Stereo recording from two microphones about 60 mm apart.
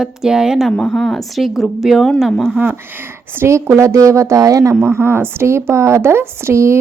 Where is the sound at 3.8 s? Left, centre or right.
Right.